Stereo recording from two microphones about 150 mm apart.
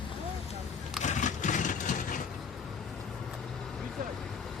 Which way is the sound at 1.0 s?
55° left (ahead or behind).